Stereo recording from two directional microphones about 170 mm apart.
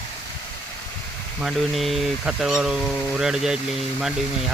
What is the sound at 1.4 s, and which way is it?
Speech, centre (ahead or behind).